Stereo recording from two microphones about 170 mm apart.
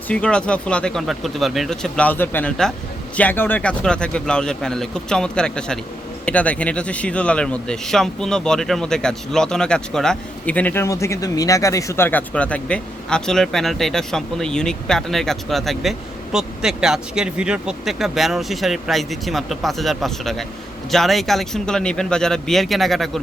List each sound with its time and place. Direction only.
0.1 s speech: 5° left (ahead or behind)